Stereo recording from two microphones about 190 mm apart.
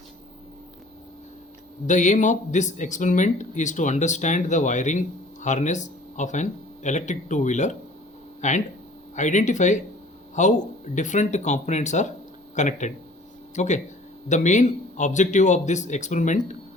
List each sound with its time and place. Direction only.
1.9 s speech: 40° left (ahead or behind)